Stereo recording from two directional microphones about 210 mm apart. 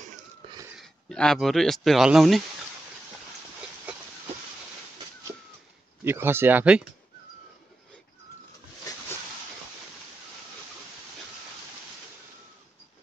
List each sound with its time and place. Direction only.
0.7 s speech: 5° left (ahead or behind)
6.0 s speech: 10° right (ahead or behind)
8.9 s a sound: 15° left (ahead or behind)